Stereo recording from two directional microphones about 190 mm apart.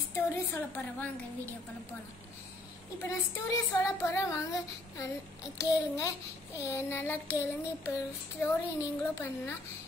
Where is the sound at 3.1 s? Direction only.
15° left (ahead or behind).